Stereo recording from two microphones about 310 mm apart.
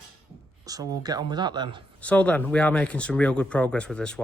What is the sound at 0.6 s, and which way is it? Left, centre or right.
Speech, centre.